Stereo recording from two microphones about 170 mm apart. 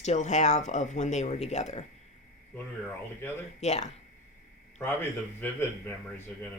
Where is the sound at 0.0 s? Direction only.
45° left (ahead or behind).